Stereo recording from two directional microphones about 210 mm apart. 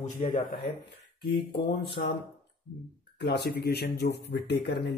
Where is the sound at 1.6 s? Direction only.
50° left (ahead or behind).